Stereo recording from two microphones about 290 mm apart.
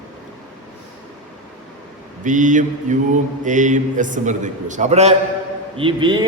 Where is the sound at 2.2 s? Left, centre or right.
Right.